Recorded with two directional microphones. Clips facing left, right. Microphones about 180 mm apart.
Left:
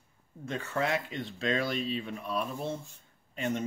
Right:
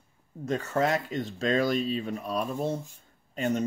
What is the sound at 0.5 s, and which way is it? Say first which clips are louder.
Speech: right 5 dB; 40° right (ahead or behind).